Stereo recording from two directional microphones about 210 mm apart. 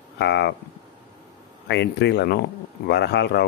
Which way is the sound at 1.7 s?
55° left (ahead or behind).